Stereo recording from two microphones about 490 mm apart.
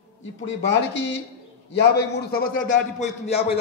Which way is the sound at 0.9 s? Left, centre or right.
Left.